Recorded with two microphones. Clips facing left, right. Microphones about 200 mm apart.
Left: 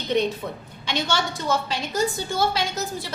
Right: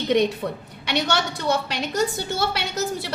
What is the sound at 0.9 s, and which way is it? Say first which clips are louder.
A woman's voice: right 2 dB; 65° right (ahead or behind).